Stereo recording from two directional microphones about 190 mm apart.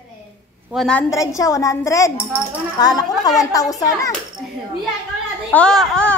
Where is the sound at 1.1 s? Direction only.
15° left (ahead or behind).